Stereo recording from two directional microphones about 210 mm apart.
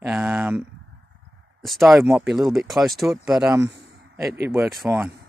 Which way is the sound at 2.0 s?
10° right (ahead or behind).